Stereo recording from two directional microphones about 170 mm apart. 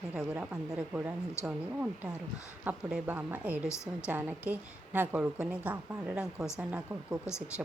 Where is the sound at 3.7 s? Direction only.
15° left (ahead or behind).